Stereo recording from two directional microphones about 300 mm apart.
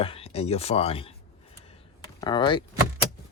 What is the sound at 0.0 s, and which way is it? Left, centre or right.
Speech, centre.